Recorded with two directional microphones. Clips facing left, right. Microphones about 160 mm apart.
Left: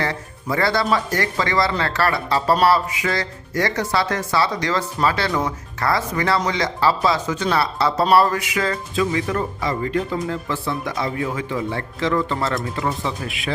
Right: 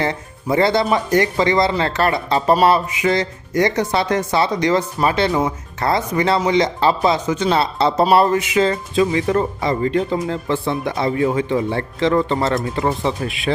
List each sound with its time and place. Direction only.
0.0 s speech: 20° right (ahead or behind)